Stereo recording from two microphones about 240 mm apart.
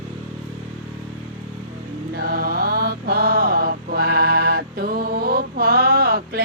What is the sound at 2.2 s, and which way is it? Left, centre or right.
Mantra, right.